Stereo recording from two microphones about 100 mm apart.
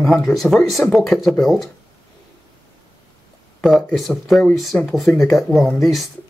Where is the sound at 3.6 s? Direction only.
Centre (ahead or behind).